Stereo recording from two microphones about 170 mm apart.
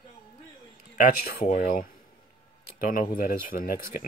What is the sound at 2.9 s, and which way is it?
Speech, 55° left (ahead or behind).